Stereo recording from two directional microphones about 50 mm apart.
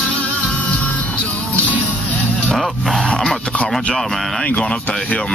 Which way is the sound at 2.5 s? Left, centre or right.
Centre.